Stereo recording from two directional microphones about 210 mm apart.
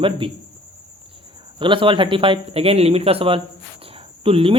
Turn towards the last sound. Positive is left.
turn(degrees=-25)  # may be behind; listen again after turning